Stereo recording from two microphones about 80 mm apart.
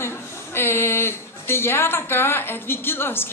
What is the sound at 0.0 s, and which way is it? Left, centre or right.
A woman's voice, left.